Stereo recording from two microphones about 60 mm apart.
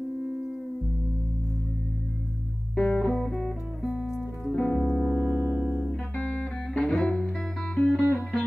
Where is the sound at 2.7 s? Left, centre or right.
Centre.